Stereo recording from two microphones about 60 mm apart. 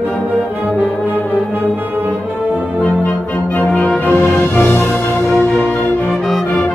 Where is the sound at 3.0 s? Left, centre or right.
Left.